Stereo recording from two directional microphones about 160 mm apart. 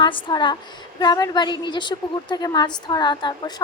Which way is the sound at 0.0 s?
30° left (ahead or behind).